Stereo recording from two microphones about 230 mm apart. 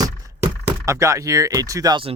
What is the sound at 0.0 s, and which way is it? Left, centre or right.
Speech, centre.